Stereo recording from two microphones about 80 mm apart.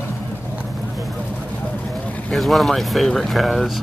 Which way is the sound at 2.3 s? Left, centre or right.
Centre.